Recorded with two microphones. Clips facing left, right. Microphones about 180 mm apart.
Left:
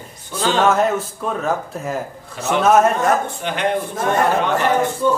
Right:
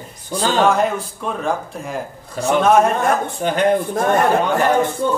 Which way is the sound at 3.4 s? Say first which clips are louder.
Right 5 dB; 40° right (ahead or behind).